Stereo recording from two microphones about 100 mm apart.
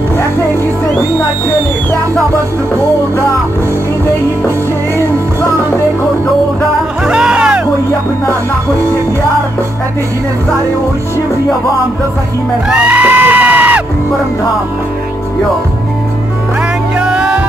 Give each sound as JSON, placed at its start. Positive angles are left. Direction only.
{"t": 7.1, "sound": "music", "side_deg": -10}
{"t": 12.6, "sound": "music", "side_deg": -15}
{"t": 17.0, "sound": "music", "side_deg": -10}